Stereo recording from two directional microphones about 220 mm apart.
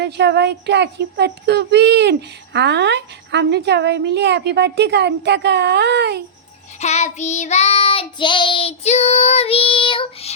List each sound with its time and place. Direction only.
0.0 s speech: 50° right (ahead or behind)
6.7 s child singing: 30° left (ahead or behind)